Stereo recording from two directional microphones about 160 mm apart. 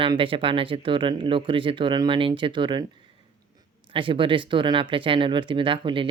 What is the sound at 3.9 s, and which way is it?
Speech, 30° right (ahead or behind).